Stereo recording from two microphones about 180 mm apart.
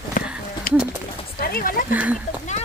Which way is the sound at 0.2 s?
50° left (ahead or behind).